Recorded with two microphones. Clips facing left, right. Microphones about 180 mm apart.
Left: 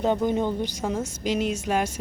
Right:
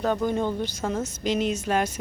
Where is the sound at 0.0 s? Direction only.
20° left (ahead or behind).